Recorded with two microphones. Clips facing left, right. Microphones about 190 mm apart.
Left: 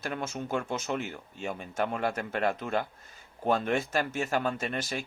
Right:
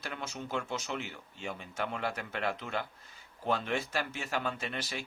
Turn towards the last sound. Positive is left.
turn(degrees=45)  # may be behind; listen again after turning